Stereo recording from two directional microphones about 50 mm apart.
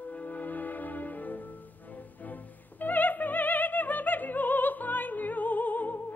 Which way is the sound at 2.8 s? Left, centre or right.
Left.